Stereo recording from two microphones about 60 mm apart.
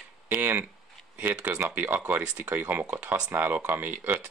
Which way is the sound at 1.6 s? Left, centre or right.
Right.